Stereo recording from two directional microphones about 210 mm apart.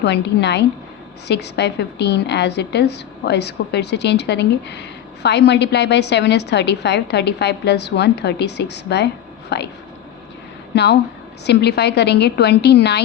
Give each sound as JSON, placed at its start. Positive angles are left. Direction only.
{"t": 0.0, "sound": "a woman's voice", "side_deg": 55}
{"t": 10.7, "sound": "a woman's voice", "side_deg": 55}